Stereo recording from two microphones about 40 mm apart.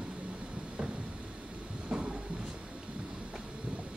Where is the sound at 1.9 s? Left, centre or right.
Right.